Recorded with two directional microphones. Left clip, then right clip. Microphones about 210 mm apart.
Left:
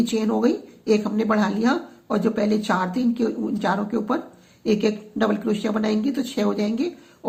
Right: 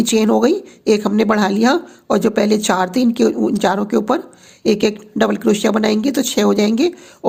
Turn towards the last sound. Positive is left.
turn(degrees=-55)  # may be behind; listen again after turning